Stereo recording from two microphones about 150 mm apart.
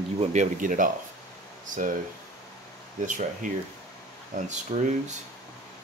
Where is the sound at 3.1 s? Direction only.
60° right (ahead or behind).